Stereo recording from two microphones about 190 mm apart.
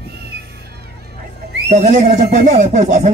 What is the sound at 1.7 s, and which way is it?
Speech, 45° right (ahead or behind).